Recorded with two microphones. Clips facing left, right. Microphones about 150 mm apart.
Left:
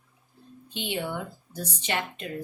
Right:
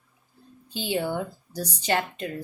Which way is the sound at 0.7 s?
35° right (ahead or behind).